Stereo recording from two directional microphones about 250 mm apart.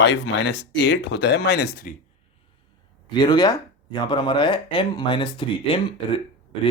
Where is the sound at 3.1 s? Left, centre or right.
Centre.